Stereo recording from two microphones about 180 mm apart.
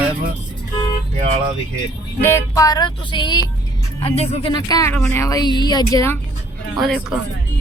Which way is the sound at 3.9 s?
35° left (ahead or behind).